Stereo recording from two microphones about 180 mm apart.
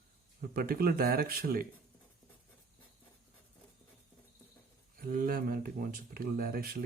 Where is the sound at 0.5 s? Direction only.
55° right (ahead or behind).